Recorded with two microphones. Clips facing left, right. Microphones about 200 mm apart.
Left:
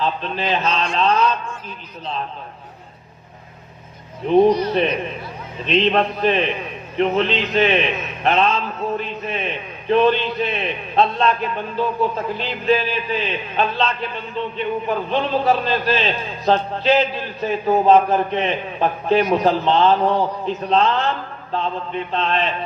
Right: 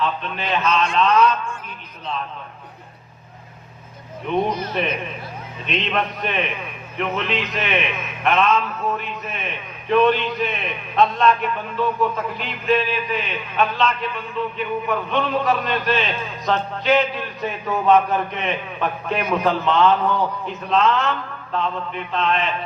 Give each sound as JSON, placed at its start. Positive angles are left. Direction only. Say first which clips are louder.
{"t": 0.0, "sound": "a man's voice", "louder": "left 2 dB", "side_deg": 30}
{"t": 4.2, "sound": "a man's voice", "louder": "left 8 dB", "side_deg": 35}